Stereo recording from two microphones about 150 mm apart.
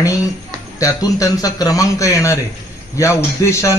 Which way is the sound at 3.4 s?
20° left (ahead or behind).